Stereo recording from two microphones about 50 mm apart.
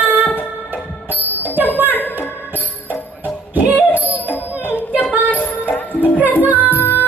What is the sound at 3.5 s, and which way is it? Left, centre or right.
Music, right.